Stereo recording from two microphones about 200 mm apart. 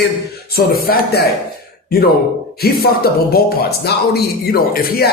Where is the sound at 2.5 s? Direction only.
50° left (ahead or behind).